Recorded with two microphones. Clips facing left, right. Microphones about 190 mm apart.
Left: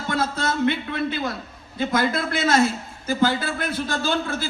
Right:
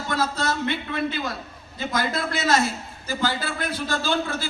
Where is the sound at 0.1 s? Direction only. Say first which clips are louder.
Left 1 dB; 55° left (ahead or behind).